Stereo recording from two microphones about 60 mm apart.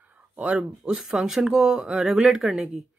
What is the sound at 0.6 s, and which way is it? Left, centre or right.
Speech, centre.